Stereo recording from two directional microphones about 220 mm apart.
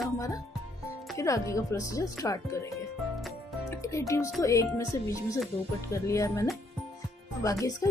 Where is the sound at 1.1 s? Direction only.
15° left (ahead or behind).